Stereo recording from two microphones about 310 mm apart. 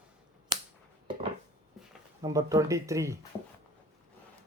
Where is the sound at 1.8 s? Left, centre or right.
Centre.